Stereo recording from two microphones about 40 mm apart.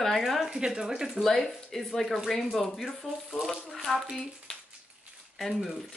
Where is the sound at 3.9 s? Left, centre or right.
Left.